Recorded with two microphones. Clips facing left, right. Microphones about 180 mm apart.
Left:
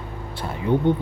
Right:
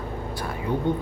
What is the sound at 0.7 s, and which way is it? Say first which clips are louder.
Speech: left 6 dB; 25° left (ahead or behind).